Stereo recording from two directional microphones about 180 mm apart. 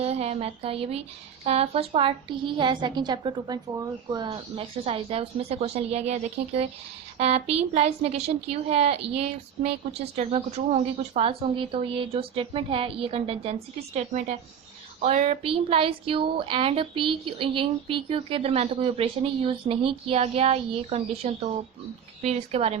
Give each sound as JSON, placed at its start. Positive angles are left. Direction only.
{"t": 0.0, "sound": "a woman's voice", "side_deg": -35}